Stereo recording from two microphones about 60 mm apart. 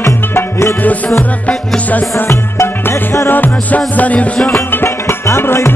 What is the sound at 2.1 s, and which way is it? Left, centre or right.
Music, left.